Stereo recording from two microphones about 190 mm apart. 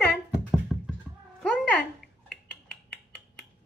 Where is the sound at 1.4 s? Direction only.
5° left (ahead or behind).